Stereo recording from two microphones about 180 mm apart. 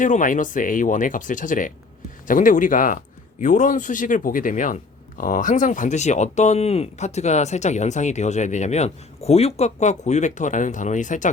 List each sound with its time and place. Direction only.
0.0 s speech: 45° left (ahead or behind)